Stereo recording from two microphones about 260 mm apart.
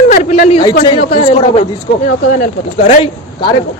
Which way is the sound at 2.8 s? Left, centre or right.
Left.